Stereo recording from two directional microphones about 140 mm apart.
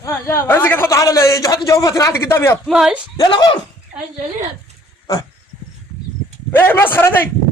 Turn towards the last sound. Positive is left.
turn(degrees=15)  # may be behind; listen again after turning